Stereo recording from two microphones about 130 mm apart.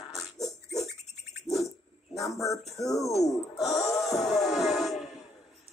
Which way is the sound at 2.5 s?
55° left (ahead or behind).